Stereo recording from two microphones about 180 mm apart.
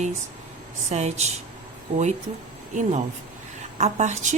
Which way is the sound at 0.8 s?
40° right (ahead or behind).